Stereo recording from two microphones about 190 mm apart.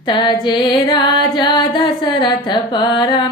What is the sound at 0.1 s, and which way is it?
Carnatic music, 25° left (ahead or behind).